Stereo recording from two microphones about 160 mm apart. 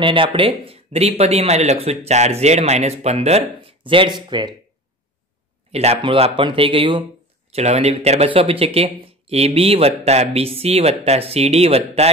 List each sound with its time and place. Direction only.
0.0 s speech: 30° right (ahead or behind)
5.7 s speech: 40° right (ahead or behind)